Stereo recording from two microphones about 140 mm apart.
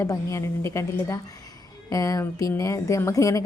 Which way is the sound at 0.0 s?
20° left (ahead or behind).